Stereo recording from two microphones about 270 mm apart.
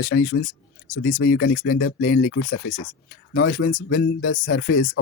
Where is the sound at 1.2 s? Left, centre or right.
Left.